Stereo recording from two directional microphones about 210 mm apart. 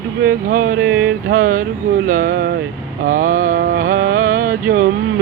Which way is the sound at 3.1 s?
40° right (ahead or behind).